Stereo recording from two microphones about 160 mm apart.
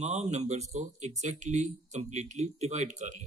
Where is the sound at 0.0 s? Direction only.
45° right (ahead or behind).